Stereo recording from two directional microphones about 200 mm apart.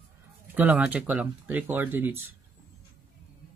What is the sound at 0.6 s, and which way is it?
Speech, 10° right (ahead or behind).